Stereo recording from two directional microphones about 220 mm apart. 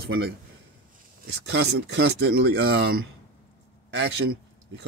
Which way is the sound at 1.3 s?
50° right (ahead or behind).